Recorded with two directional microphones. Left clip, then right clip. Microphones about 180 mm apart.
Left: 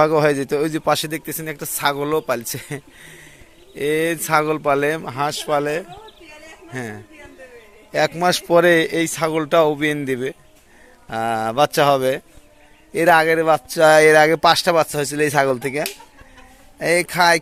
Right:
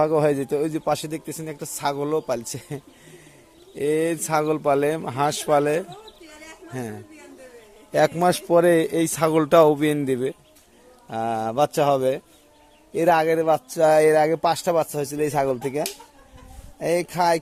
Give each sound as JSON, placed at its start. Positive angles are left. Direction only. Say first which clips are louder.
{"t": 0.0, "sound": "a man's voice", "louder": "left 4 dB", "side_deg": -5}
{"t": 16.8, "sound": "a man's voice", "louder": "left 5 dB", "side_deg": 0}